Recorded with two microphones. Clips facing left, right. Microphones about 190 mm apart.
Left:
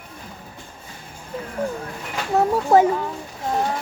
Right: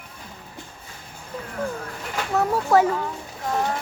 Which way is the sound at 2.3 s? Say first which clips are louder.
Left 3 dB; 25° left (ahead or behind).